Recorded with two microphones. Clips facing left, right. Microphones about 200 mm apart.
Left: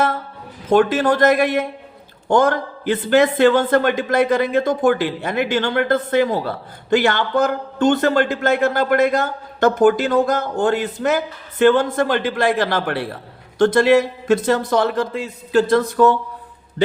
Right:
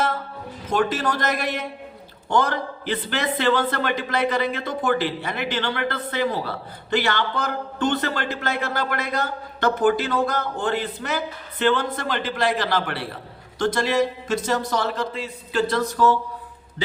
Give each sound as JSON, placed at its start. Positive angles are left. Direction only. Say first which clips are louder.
{"t": 0.7, "sound": "a man's voice", "louder": "left 8 dB", "side_deg": 55}